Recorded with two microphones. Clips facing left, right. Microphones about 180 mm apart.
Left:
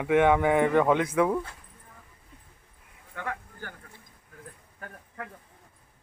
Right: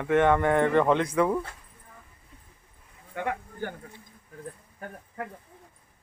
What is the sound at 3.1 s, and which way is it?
Speech, 20° right (ahead or behind).